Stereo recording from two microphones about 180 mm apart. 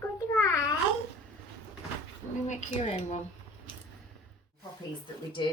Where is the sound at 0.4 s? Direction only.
20° left (ahead or behind).